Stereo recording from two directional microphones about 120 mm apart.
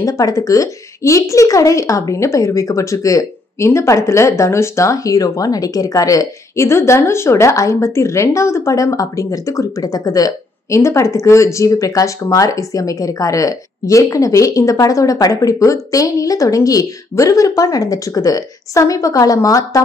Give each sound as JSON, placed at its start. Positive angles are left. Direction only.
{"t": 0.0, "sound": "a woman's voice", "side_deg": 30}